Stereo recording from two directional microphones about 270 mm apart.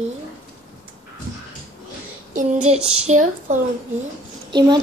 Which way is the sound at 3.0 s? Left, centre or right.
Right.